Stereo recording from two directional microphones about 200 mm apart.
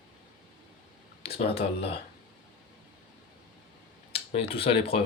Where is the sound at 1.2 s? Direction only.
30° left (ahead or behind).